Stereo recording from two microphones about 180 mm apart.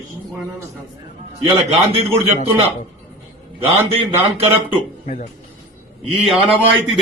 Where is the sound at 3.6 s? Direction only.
30° right (ahead or behind).